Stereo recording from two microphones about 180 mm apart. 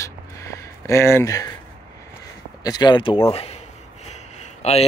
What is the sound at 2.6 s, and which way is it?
Speech, 20° left (ahead or behind).